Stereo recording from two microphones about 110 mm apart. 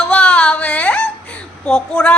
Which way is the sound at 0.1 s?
10° left (ahead or behind).